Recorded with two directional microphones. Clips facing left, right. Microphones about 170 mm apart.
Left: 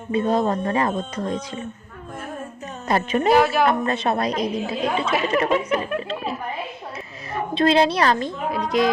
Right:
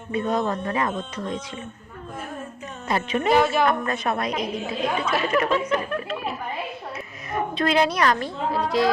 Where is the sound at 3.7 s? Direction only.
30° left (ahead or behind).